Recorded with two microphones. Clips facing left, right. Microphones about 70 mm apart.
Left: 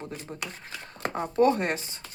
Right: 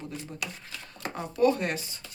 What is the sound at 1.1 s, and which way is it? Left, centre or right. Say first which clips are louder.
Speech: left 2 dB; left.